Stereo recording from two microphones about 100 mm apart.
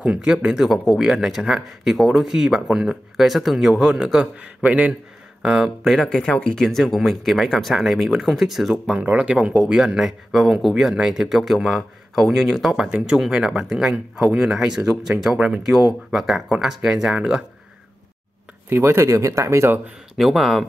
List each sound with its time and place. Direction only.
0.0 s speech: 10° right (ahead or behind)
8.9 s speech: 15° right (ahead or behind)
18.7 s speech: 25° right (ahead or behind)
20.2 s speech: centre (ahead or behind)